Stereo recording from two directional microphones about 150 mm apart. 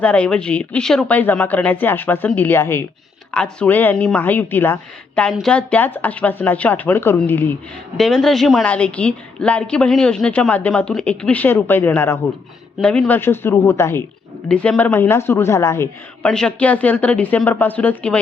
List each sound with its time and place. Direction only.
0.0 s a woman's voice: 10° left (ahead or behind)
7.9 s a woman's voice: centre (ahead or behind); by 15.9 s 20° left (ahead or behind)
16.2 s a woman's voice: 5° left (ahead or behind)